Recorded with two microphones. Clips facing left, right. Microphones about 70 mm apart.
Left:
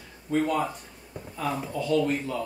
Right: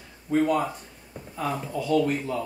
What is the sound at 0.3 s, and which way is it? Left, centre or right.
A man's voice, centre.